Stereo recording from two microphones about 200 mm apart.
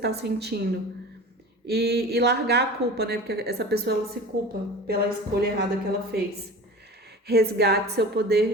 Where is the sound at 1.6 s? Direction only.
55° right (ahead or behind).